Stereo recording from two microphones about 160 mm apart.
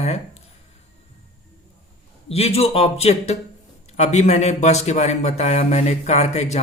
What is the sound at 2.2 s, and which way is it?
A man's voice, 40° left (ahead or behind).